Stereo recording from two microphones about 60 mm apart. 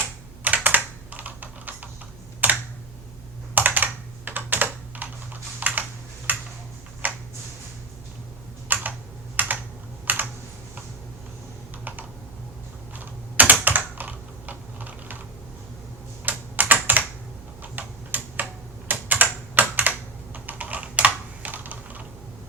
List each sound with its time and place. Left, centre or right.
0.4 s typing: right
2.4 s computer keyboard: right
6.3 s tick-tock: right
7.0 s a sound: right
8.6 s computer keyboard: right
11.9 s computer keyboard: right
13.0 s typing: right
16.2 s computer keyboard: right
17.6 s typing: right